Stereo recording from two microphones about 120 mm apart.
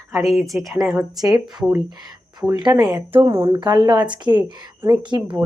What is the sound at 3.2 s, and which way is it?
Speech, 25° right (ahead or behind).